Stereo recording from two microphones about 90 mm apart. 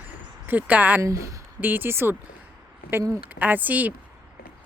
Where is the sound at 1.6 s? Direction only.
20° right (ahead or behind).